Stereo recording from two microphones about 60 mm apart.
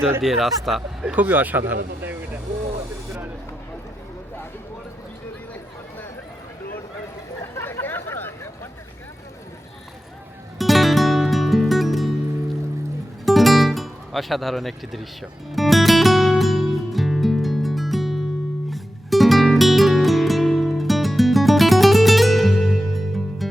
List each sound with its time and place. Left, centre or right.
0.2 s speech: centre
1.1 s speech: right
7.5 s a sound: left
10.6 s music: centre
13.2 s music: centre